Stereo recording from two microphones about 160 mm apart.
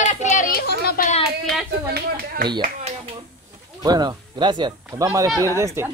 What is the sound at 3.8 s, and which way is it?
Speech, 25° right (ahead or behind).